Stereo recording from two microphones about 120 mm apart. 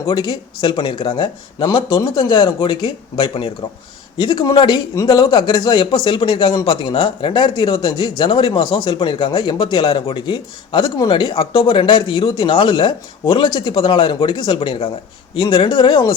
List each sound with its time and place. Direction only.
0.1 s speech: 40° left (ahead or behind)